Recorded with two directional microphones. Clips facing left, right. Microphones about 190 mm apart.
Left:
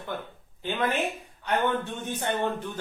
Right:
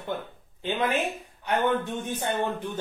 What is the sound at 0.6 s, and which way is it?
Speech, 20° right (ahead or behind).